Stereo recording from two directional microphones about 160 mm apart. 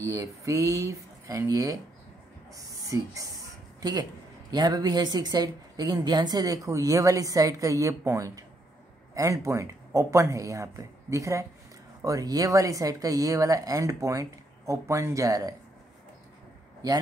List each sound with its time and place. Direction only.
0.0 s a woman's voice: 20° right (ahead or behind)